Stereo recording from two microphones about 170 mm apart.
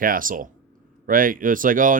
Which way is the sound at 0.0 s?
55° right (ahead or behind).